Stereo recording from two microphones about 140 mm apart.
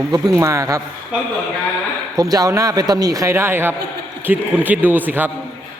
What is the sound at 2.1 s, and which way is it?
A man's voice, 25° right (ahead or behind).